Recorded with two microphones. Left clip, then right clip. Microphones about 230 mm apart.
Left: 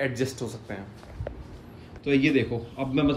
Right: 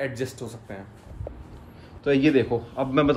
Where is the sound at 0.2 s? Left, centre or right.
Centre.